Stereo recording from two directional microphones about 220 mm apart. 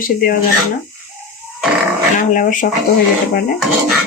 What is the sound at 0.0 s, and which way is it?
Speech, 40° left (ahead or behind).